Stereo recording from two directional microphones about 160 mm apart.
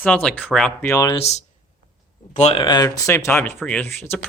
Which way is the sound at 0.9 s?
20° left (ahead or behind).